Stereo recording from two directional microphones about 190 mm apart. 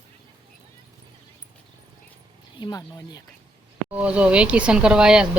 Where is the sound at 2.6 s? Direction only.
20° left (ahead or behind).